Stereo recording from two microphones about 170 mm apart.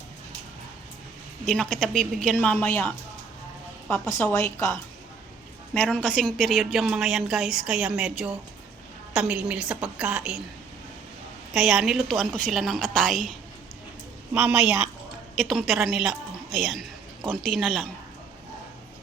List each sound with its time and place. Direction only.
1.5 s a woman's voice: 5° left (ahead or behind)
5.7 s a woman's voice: 5° left (ahead or behind)
11.5 s a woman's voice: 5° right (ahead or behind)
14.3 s a woman's voice: 5° right (ahead or behind)